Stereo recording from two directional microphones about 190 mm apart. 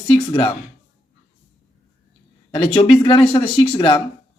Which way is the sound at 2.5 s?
30° left (ahead or behind).